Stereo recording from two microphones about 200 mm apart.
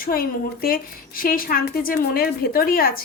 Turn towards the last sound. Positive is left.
turn(degrees=45)  # may be behind; listen again after turning